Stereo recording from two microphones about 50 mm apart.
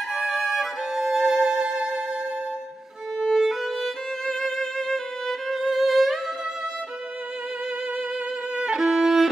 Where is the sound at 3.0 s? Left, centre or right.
Centre.